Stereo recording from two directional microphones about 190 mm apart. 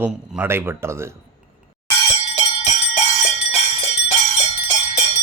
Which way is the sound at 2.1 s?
35° left (ahead or behind).